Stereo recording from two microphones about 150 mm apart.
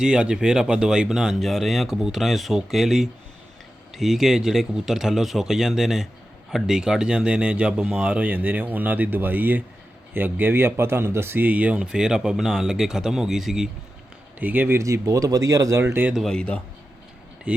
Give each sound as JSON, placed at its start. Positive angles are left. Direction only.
{"t": 0.0, "sound": "speech", "side_deg": -5}
{"t": 16.1, "sound": "speech", "side_deg": 5}